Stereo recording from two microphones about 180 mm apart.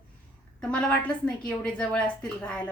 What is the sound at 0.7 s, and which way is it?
A woman's voice, 5° left (ahead or behind).